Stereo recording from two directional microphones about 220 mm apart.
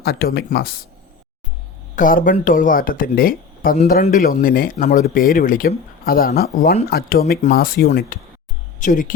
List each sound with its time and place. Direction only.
0.0 s speech: 45° left (ahead or behind)
2.0 s speech: 40° left (ahead or behind)